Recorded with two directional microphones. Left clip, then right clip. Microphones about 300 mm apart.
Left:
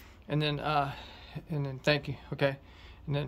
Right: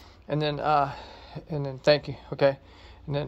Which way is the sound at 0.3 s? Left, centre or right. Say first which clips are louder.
Right 6 dB; centre.